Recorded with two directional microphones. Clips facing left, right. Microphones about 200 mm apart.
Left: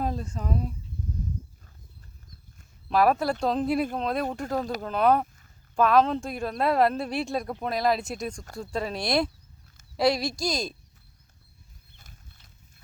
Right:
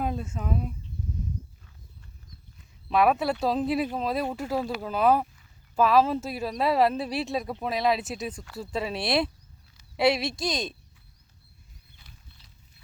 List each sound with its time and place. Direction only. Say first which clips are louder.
0.0 s speech: even; 5° right (ahead or behind)
2.9 s speech: even; centre (ahead or behind)
11.9 s a sound: left 2 dB; 45° left (ahead or behind)